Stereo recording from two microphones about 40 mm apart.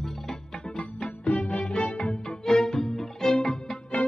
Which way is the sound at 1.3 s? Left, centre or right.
Left.